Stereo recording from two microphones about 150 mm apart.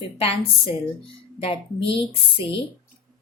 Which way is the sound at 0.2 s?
40° left (ahead or behind).